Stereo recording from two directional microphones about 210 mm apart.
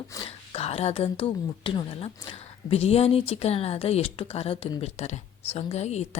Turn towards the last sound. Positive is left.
turn(degrees=30)  # may be behind; listen again after turning